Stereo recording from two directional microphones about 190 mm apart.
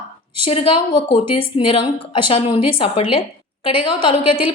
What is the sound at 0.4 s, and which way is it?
A woman's voice, 30° left (ahead or behind).